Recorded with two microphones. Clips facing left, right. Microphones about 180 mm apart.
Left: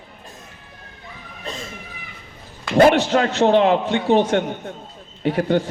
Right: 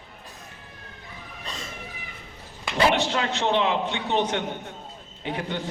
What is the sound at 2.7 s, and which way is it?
A man's voice, 50° left (ahead or behind).